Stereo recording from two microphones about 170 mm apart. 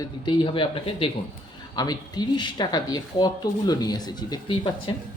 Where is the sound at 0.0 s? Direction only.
30° left (ahead or behind).